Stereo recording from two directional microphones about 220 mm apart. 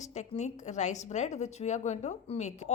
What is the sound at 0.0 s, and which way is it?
A woman's voice, 30° left (ahead or behind).